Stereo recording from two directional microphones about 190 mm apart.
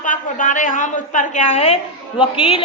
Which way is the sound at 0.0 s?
45° left (ahead or behind).